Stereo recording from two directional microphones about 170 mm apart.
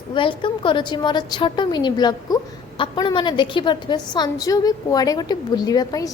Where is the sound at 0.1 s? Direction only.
30° left (ahead or behind).